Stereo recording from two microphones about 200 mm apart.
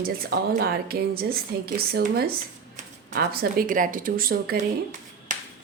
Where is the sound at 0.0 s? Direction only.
50° right (ahead or behind).